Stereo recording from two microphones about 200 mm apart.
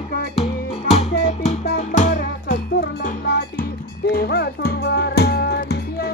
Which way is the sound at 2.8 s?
55° left (ahead or behind).